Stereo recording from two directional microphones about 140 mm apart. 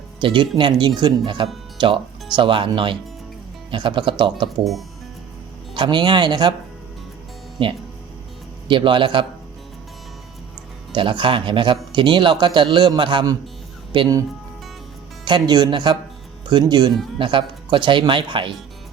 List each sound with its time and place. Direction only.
0.2 s speech: 40° right (ahead or behind)
5.7 s speech: 35° right (ahead or behind)
8.6 s speech: 35° right (ahead or behind)
10.9 s speech: 35° right (ahead or behind)
15.2 s speech: 30° right (ahead or behind)